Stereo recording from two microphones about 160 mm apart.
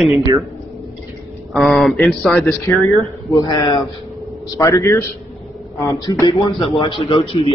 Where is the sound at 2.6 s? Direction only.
20° left (ahead or behind).